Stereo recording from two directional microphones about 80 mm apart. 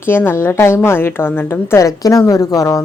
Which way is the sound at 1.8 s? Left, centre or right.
Left.